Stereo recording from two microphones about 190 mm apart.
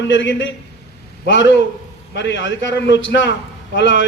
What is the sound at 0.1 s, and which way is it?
A man's voice, 75° left (ahead or behind).